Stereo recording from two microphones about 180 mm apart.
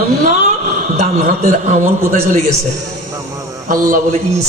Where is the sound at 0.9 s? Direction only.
40° right (ahead or behind).